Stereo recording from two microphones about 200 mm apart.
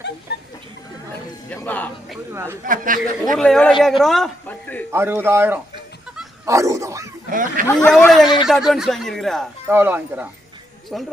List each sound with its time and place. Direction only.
0.3 s a sound: 55° left (ahead or behind)
1.5 s speech: 10° left (ahead or behind)
2.3 s a man's voice: 15° right (ahead or behind)
2.6 s speech: 40° right (ahead or behind)
3.3 s a man's voice: 5° left (ahead or behind)
4.9 s a man's voice: 10° right (ahead or behind)
6.4 s dog: 15° right (ahead or behind)
7.3 s speech: 40° right (ahead or behind)
7.8 s a man's voice: 5° left (ahead or behind)
8.2 s a man's voice: 20° left (ahead or behind)
8.4 s a man's voice: centre (ahead or behind)
9.6 s a man's voice: 10° right (ahead or behind)
10.9 s a man's voice: centre (ahead or behind)